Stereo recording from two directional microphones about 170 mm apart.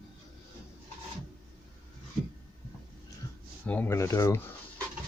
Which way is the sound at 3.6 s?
10° left (ahead or behind).